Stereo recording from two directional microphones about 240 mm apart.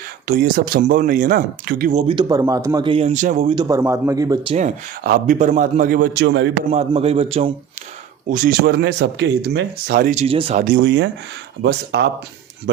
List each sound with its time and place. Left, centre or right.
0.3 s speech: right; by 4.5 s centre
5.0 s speech: right
6.7 s speech: right
8.3 s speech: right